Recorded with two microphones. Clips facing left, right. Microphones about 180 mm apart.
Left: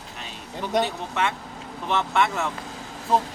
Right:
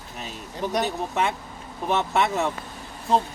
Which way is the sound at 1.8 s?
40° right (ahead or behind).